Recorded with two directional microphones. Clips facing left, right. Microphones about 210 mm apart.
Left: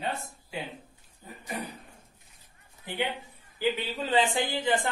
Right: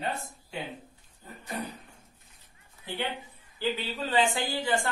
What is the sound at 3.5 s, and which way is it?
A man's voice, 15° left (ahead or behind).